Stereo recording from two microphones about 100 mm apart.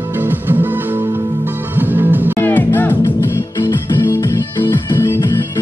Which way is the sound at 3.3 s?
30° left (ahead or behind).